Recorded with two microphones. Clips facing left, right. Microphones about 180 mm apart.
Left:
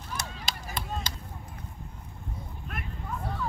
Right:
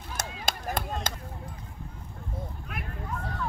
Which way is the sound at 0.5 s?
50° right (ahead or behind).